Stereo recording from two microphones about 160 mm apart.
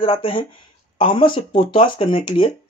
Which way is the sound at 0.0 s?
35° left (ahead or behind).